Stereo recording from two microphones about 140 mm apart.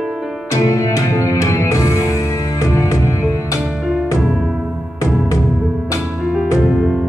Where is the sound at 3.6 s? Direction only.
5° right (ahead or behind).